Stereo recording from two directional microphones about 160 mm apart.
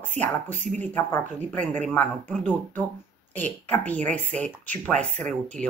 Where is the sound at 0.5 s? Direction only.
50° right (ahead or behind).